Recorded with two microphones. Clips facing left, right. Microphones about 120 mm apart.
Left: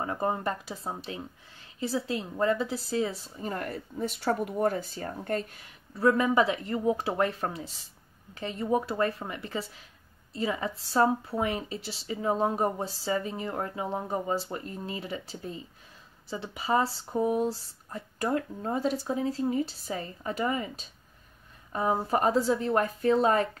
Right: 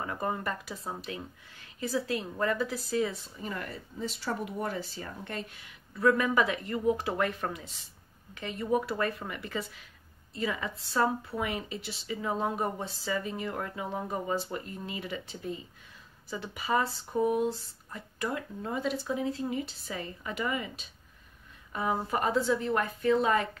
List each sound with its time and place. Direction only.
0.0 s speech: 30° left (ahead or behind)